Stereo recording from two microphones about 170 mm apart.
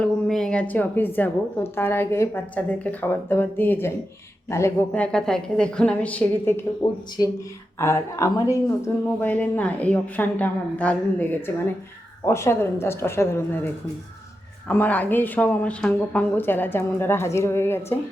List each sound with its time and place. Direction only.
0.0 s a woman's voice: 5° left (ahead or behind)
7.8 s a woman's voice: 15° left (ahead or behind)
14.7 s a woman's voice: 10° left (ahead or behind)